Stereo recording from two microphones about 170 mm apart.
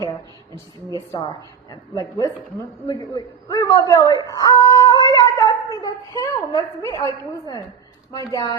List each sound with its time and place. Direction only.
1.1 s a woman's voice: 25° left (ahead or behind)